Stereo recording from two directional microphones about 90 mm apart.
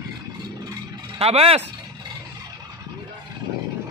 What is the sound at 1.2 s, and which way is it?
Speech, 90° right.